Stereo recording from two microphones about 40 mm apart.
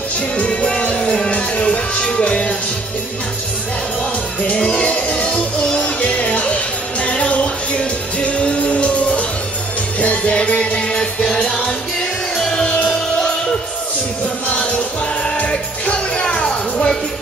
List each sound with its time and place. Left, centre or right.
0.4 s music: left
4.5 s music: left; by 12.6 s centre
15.3 s music: left